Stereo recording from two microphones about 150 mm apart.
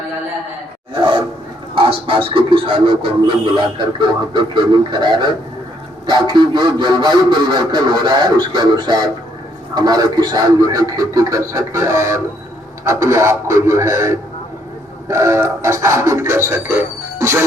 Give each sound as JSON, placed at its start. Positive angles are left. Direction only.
{"t": 1.7, "sound": "speech", "side_deg": -35}
{"t": 4.4, "sound": "speech", "side_deg": -30}